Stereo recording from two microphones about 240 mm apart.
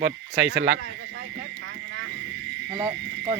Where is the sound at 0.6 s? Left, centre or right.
Right.